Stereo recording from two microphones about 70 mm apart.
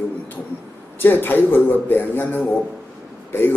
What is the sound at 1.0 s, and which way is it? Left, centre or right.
A man's voice, left.